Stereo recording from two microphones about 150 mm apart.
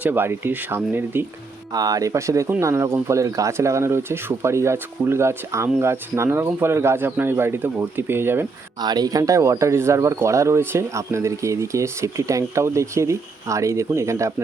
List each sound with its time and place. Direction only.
0.0 s speech: 15° right (ahead or behind)
1.7 s speech: 25° right (ahead or behind)
8.8 s speech: 25° right (ahead or behind)